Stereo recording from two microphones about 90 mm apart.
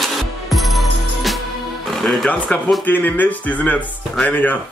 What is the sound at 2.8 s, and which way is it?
Speech, 20° left (ahead or behind).